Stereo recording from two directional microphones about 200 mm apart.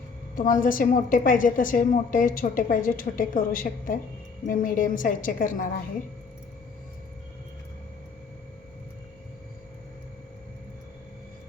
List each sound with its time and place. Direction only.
0.3 s a woman's voice: 45° left (ahead or behind)